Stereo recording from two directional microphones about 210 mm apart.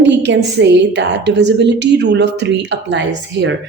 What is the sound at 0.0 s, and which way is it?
A woman's voice, 55° right (ahead or behind).